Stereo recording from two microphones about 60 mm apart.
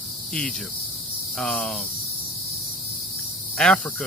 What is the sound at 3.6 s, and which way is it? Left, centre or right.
Speech, centre.